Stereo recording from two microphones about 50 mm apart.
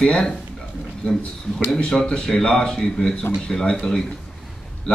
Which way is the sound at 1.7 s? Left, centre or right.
Centre.